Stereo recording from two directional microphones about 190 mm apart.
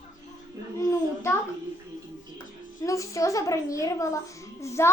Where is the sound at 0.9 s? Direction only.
15° left (ahead or behind).